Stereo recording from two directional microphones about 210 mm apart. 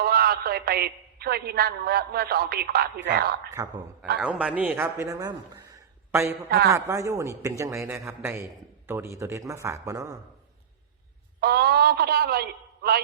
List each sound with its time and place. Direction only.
0.0 s a man's voice: 50° right (ahead or behind)
4.2 s a man's voice: 5° right (ahead or behind)
11.3 s a man's voice: 50° right (ahead or behind)